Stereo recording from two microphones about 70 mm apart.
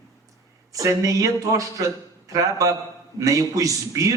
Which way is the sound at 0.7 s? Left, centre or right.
Right.